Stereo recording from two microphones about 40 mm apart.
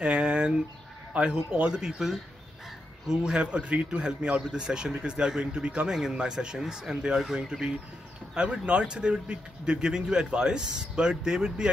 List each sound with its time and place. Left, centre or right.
0.0 s a sound: right
1.3 s speech: right
8.4 s speech: right